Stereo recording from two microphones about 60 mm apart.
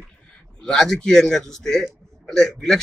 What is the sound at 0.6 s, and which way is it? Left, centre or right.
A man's voice, centre.